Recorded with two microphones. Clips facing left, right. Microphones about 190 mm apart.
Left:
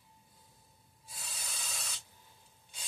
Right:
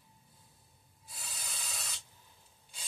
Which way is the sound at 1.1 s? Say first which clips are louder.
Even; centre (ahead or behind).